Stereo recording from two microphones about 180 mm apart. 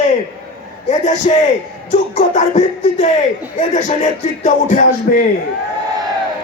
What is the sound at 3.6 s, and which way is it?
Music, 40° left (ahead or behind).